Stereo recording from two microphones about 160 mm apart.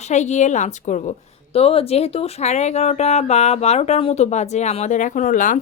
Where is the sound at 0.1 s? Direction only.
45° left (ahead or behind).